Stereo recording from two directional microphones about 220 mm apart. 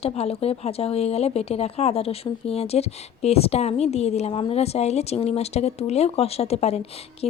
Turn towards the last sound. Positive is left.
turn(degrees=25)  # may be behind; listen again after turning